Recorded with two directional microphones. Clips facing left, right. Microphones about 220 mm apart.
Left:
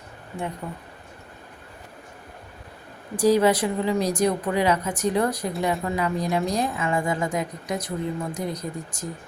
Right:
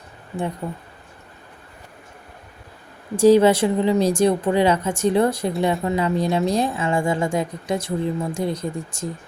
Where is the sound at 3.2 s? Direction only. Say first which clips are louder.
Right 5 dB; 25° right (ahead or behind).